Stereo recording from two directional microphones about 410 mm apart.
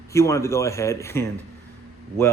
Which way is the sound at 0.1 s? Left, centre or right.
Centre.